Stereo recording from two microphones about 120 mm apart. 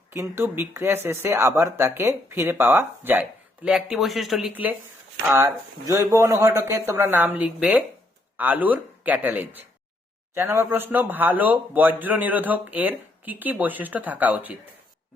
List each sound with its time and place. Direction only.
0.1 s speech: 20° right (ahead or behind)
5.3 s a man's voice: 25° right (ahead or behind)